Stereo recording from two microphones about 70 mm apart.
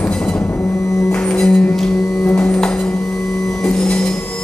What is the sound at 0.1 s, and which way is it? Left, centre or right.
Music, centre.